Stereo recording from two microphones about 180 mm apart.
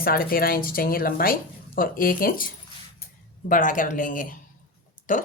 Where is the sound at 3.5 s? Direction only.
50° left (ahead or behind).